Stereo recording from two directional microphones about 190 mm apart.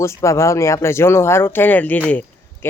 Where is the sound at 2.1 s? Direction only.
10° left (ahead or behind).